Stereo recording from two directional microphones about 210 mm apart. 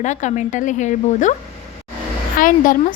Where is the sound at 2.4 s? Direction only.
40° left (ahead or behind).